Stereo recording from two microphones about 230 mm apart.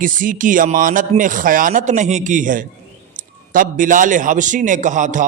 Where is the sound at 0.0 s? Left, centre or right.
Right.